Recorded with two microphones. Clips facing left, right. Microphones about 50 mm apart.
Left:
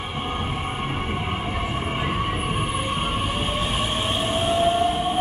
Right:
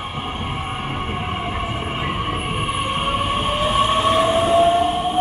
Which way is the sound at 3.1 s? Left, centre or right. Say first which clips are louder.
Right 5 dB; right.